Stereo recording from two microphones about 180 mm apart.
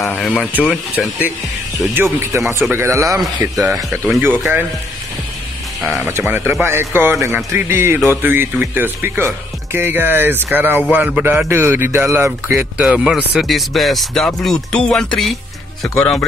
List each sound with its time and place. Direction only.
0.0 s speech: 5° left (ahead or behind)
2.6 s speech: 10° right (ahead or behind)
6.0 s speech: 15° right (ahead or behind); by 16.3 s 5° left (ahead or behind)